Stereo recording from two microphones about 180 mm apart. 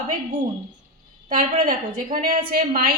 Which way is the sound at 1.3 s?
50° right (ahead or behind).